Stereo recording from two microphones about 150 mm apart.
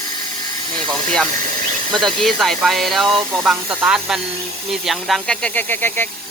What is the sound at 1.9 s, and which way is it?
A man's voice, 5° left (ahead or behind).